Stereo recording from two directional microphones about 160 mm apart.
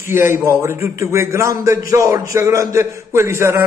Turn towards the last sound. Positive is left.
turn(degrees=-15)  # may be behind; listen again after turning